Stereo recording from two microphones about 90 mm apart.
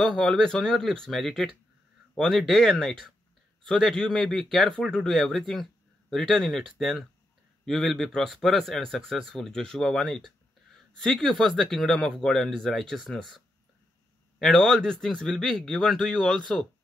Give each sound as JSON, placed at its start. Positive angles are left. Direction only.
{"t": 0.0, "sound": "speech", "side_deg": 10}
{"t": 14.4, "sound": "speech", "side_deg": 5}